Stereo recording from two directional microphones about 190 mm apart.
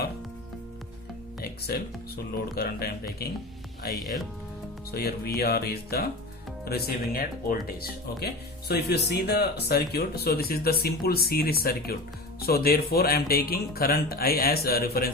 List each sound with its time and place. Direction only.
1.4 s music: 55° left (ahead or behind)
2.6 s speech: 55° left (ahead or behind)